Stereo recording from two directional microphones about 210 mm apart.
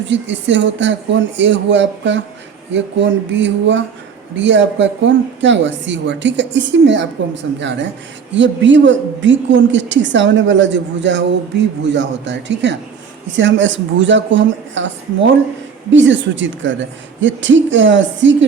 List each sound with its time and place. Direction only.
0.1 s a woman's voice: 60° right (ahead or behind)
15.9 s a woman's voice: 60° right (ahead or behind)